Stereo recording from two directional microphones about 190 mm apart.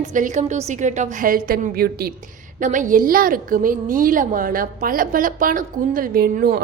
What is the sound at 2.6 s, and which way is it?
A woman's voice, 40° right (ahead or behind).